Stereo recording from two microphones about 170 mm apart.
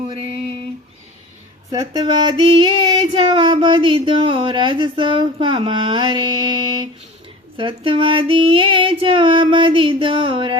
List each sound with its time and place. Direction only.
0.1 s female singing: 35° right (ahead or behind)
1.7 s a woman's voice: 20° right (ahead or behind)
7.5 s female singing: 30° right (ahead or behind)